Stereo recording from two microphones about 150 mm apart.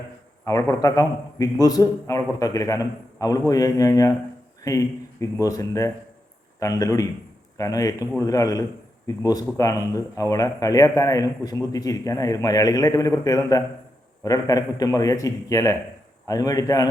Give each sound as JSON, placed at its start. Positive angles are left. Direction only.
{"t": 0.4, "sound": "a man's voice", "side_deg": 20}